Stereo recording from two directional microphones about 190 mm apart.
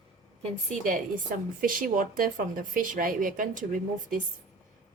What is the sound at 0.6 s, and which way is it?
A woman's voice, 45° right (ahead or behind).